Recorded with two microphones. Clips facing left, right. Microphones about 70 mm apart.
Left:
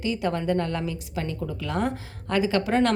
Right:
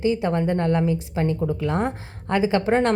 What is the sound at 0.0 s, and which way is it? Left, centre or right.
A woman's voice, right.